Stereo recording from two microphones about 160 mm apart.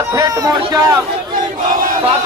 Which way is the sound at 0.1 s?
20° right (ahead or behind).